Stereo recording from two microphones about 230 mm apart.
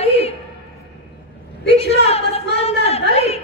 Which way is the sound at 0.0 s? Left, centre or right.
Left.